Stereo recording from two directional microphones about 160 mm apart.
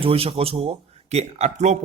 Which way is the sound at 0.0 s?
35° right (ahead or behind).